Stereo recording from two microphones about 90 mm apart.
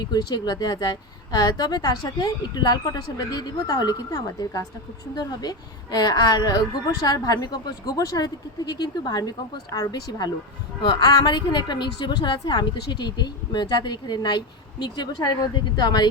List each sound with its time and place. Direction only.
0.0 s a woman's voice: 50° left (ahead or behind)